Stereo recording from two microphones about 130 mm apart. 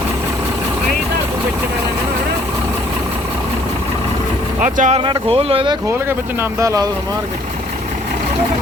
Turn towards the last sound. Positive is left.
turn(degrees=-25)  # may be behind; listen again after turning